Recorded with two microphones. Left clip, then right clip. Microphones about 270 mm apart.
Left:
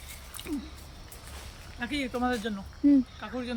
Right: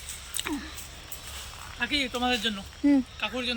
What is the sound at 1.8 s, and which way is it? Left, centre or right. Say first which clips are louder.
Speech: right 4 dB; centre.